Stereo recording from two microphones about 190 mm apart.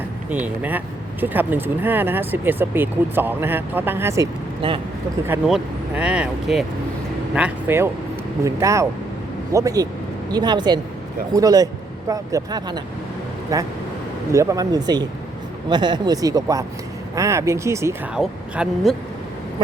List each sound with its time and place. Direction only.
0.3 s speech: 10° right (ahead or behind)
4.6 s speech: 30° right (ahead or behind)
5.3 s speech: 5° right (ahead or behind)
18.1 s speech: 5° right (ahead or behind)